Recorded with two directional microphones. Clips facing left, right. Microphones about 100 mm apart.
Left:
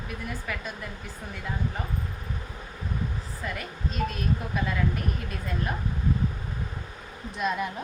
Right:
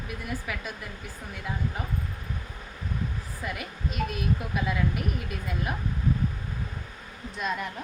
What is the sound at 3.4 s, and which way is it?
A woman's voice, 10° right (ahead or behind).